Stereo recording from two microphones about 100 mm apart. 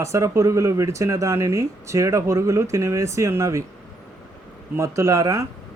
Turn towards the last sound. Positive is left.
turn(degrees=-30)  # may be behind; listen again after turning